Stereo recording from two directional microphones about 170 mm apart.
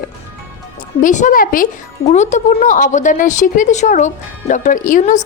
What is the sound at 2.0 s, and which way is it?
A woman's voice, 45° left (ahead or behind).